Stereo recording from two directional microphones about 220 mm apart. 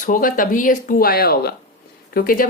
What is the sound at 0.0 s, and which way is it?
Speech, 40° left (ahead or behind).